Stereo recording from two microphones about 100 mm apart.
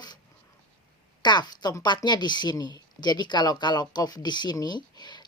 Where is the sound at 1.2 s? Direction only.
45° left (ahead or behind).